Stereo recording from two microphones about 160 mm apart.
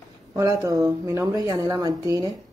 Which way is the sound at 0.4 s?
20° right (ahead or behind).